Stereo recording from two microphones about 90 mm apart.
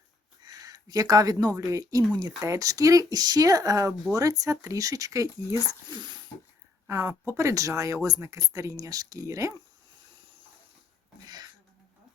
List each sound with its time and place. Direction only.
0.4 s speech: 45° right (ahead or behind)
6.8 s speech: 30° right (ahead or behind)
11.3 s a sound: 50° right (ahead or behind)